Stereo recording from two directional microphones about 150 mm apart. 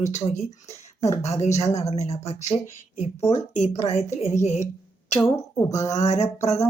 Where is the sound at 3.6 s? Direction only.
45° left (ahead or behind).